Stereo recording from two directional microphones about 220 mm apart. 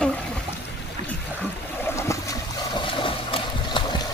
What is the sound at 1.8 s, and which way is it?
Boat, 15° left (ahead or behind).